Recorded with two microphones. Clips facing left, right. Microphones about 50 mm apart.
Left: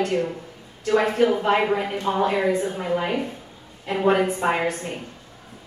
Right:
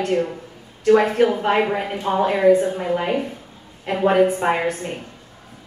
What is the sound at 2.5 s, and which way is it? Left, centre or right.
Speech, right.